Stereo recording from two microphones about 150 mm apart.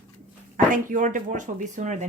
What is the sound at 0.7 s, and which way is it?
Speech, 65° right (ahead or behind).